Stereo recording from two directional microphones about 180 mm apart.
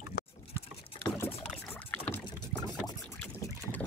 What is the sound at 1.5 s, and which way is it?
Rowboat, 5° left (ahead or behind).